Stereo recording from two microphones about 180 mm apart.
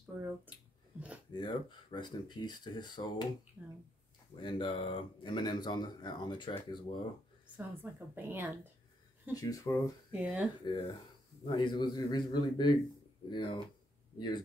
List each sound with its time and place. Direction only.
0.9 s a sound: 5° right (ahead or behind)
1.3 s speech: 25° left (ahead or behind)
3.6 s a woman's voice: 10° right (ahead or behind)
4.4 s speech: 30° left (ahead or behind)
7.5 s a woman's voice: 10° right (ahead or behind)
9.3 s speech: 20° left (ahead or behind)
10.1 s a woman's voice: 5° right (ahead or behind)
10.6 s speech: 25° left (ahead or behind)